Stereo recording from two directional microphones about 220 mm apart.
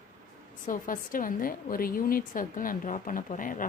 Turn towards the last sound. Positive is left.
turn(degrees=35)  # may be behind; listen again after turning